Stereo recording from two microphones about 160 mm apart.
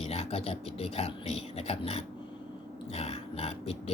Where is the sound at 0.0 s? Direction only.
40° left (ahead or behind).